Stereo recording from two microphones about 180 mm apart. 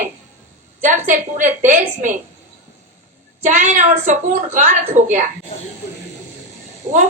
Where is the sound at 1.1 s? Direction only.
45° right (ahead or behind).